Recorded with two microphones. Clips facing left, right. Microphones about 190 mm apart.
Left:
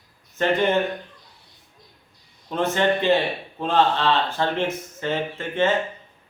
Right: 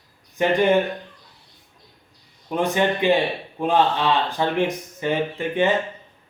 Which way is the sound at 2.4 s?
15° right (ahead or behind).